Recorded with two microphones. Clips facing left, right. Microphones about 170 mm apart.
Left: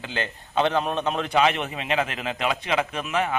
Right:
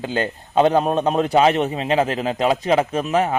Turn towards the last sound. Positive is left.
turn(degrees=-35)  # may be behind; listen again after turning